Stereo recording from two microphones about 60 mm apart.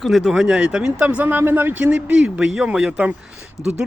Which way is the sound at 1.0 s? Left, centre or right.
Right.